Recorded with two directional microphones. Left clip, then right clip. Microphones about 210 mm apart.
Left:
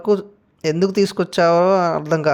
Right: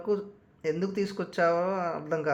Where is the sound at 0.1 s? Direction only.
40° left (ahead or behind).